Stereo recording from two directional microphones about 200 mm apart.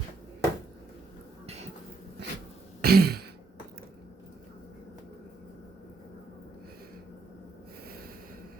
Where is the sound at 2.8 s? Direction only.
50° right (ahead or behind).